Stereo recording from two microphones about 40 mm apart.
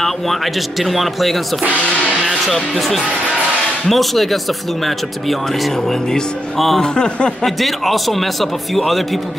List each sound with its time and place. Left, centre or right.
0.8 s speech: centre
3.9 s speech: centre
6.8 s speech: centre
7.4 s speech: centre